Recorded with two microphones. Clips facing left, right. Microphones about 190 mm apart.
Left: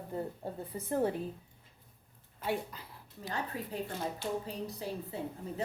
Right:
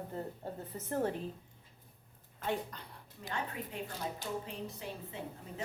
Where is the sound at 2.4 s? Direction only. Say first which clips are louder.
Left 1 dB; 5° left (ahead or behind).